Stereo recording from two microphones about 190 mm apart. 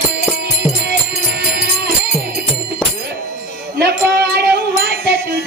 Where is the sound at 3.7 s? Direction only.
60° right (ahead or behind).